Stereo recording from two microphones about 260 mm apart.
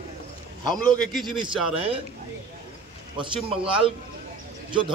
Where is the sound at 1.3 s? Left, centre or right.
Centre.